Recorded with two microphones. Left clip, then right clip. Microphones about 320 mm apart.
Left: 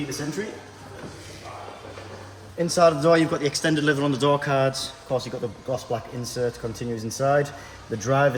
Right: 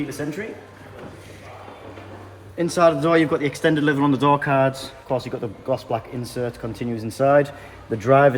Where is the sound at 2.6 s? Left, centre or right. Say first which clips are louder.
Right 1 dB; right.